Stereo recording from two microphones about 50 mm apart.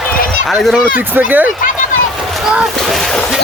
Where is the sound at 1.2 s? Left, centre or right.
Right.